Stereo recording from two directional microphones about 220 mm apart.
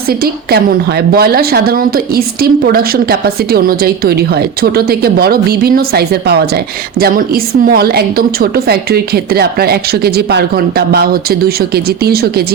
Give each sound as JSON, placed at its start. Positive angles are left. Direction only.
{"t": 0.1, "sound": "a woman's voice", "side_deg": -45}